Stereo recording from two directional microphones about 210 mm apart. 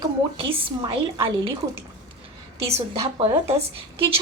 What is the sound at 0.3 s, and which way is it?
A woman's voice, 25° right (ahead or behind).